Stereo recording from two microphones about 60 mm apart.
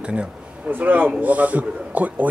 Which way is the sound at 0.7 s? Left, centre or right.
Right.